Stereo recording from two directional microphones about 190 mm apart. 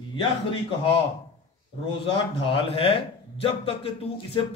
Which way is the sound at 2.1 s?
30° left (ahead or behind).